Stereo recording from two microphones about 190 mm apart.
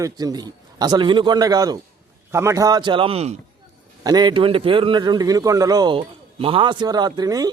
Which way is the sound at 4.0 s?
20° right (ahead or behind).